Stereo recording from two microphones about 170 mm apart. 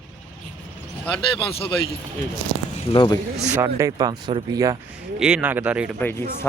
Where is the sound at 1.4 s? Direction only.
35° left (ahead or behind).